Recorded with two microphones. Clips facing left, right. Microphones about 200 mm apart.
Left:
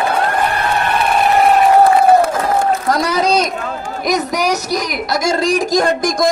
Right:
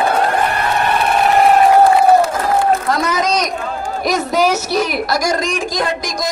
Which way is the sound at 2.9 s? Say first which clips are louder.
Left 2 dB; 35° left (ahead or behind).